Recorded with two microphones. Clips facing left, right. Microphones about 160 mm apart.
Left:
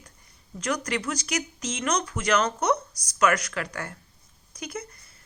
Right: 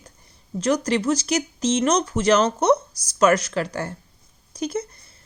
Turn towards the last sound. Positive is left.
turn(degrees=-30)  # may be behind; listen again after turning